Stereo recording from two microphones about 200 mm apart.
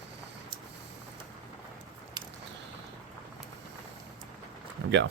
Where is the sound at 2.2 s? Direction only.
20° right (ahead or behind).